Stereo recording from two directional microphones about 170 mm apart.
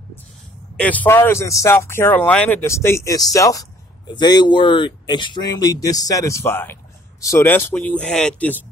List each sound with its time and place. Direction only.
0.7 s speech: 10° left (ahead or behind)